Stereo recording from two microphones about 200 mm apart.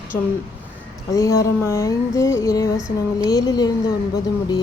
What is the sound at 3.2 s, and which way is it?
Music, 20° left (ahead or behind).